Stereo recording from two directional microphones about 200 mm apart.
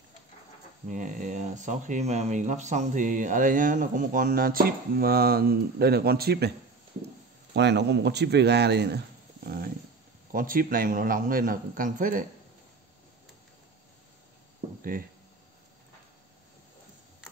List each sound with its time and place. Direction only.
0.8 s speech: 40° right (ahead or behind)
7.5 s a man's voice: 60° right (ahead or behind); by 12.3 s 40° right (ahead or behind)
14.8 s speech: 45° right (ahead or behind)